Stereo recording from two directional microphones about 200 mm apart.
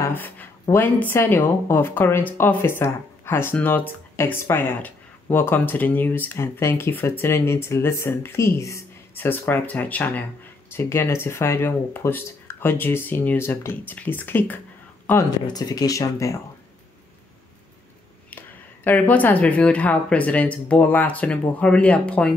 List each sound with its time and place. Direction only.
0.0 s speech: 10° left (ahead or behind)
15.4 s speech: 20° left (ahead or behind)
18.9 s speech: 10° left (ahead or behind)